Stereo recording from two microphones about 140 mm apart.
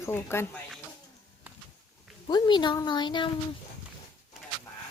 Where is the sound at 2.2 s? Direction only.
30° left (ahead or behind).